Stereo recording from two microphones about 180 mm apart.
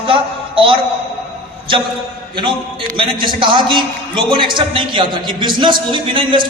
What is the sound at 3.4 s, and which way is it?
A man's voice, 25° right (ahead or behind).